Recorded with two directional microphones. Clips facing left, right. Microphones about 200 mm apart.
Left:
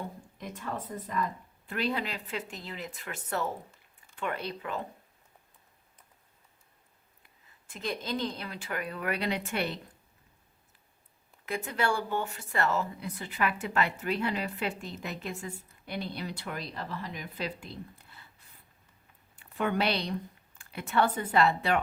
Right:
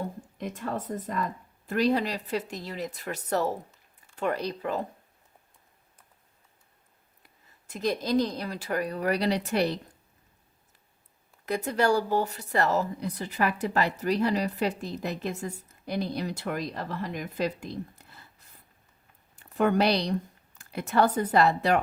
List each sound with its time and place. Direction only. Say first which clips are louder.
0.3 s speech: right 5 dB; 45° right (ahead or behind)
7.7 s speech: right 8 dB; 40° right (ahead or behind)
11.4 s speech: right 6 dB; 40° right (ahead or behind)